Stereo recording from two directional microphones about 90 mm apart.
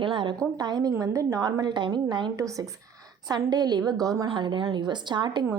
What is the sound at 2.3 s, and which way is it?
Speech, 35° right (ahead or behind).